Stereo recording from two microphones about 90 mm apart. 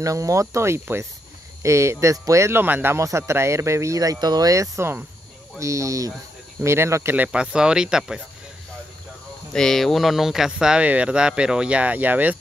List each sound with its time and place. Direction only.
0.0 s speech: 35° right (ahead or behind)
3.0 s speech: 35° right (ahead or behind)
7.3 s speech: 10° right (ahead or behind)
9.5 s speech: 5° left (ahead or behind); by 12.4 s 20° right (ahead or behind)